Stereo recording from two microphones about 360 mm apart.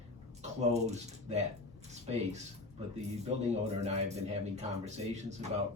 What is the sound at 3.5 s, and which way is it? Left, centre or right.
Speech, centre.